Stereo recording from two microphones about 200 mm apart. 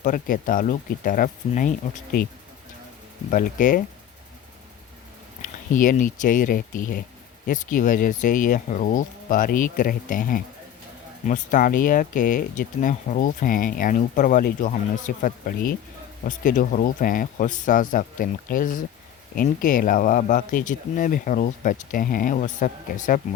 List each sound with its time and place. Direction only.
0.0 s speech: 40° left (ahead or behind)
3.2 s speech: 40° left (ahead or behind)
5.4 s speech: 40° left (ahead or behind)